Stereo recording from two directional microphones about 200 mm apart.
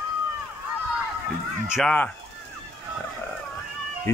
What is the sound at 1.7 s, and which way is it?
Speech, 5° left (ahead or behind).